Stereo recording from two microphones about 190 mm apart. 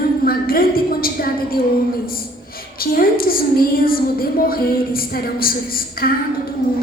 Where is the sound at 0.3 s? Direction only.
50° left (ahead or behind).